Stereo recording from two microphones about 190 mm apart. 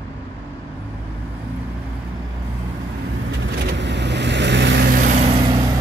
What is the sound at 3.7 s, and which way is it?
Vehicle, 65° right (ahead or behind).